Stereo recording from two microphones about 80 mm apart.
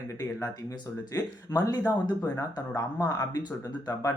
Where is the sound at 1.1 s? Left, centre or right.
Left.